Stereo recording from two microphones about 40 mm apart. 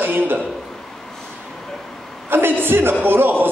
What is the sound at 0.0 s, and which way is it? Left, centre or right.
Speech, right.